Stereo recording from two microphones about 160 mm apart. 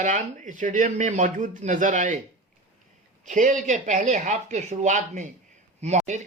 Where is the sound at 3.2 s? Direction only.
50° right (ahead or behind).